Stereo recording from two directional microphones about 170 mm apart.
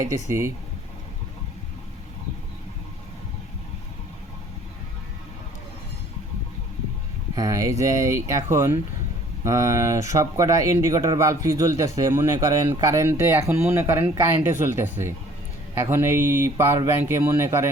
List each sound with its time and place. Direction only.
0.1 s speech: 15° right (ahead or behind)
7.3 s speech: 20° right (ahead or behind)